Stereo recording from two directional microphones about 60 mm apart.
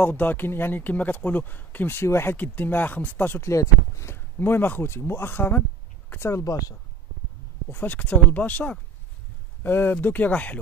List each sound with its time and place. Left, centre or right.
0.0 s speech: left
2.0 s speech: left
2.3 s speech: left
3.4 s speech: left
7.7 s speech: left
9.6 s speech: left